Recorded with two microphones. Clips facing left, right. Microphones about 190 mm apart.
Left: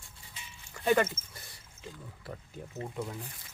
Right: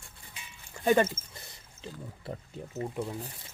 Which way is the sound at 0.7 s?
25° right (ahead or behind).